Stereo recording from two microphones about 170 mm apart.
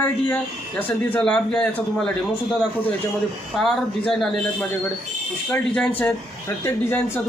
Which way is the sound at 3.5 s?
Centre (ahead or behind).